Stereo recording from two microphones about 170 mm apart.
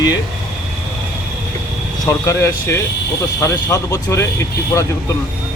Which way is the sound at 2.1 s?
20° left (ahead or behind).